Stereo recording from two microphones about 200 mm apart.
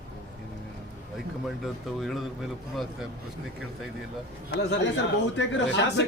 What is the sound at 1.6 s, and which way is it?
Speech, centre (ahead or behind).